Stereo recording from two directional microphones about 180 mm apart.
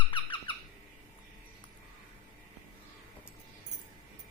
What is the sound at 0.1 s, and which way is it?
Squeak, 25° left (ahead or behind).